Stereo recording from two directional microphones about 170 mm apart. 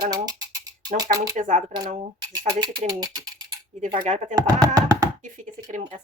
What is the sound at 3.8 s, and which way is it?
Speech, 45° right (ahead or behind).